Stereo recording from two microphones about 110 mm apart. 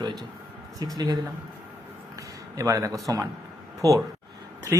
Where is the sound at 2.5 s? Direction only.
30° right (ahead or behind).